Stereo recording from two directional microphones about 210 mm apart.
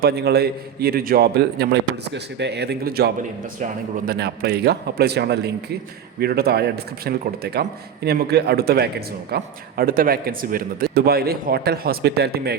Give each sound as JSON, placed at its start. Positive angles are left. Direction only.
{"t": 0.0, "sound": "speech", "side_deg": -50}